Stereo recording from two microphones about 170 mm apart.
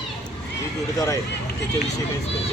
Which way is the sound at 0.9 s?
20° left (ahead or behind).